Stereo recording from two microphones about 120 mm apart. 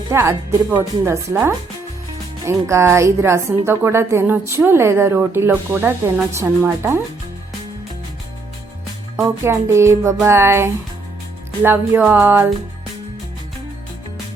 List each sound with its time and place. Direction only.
0.1 s a woman's voice: 25° right (ahead or behind)
2.5 s a woman's voice: 25° right (ahead or behind)
9.4 s a woman's voice: 20° right (ahead or behind)
11.6 s music: 15° right (ahead or behind)